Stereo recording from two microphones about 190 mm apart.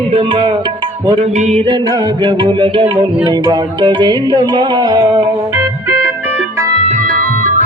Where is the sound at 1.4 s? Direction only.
35° right (ahead or behind).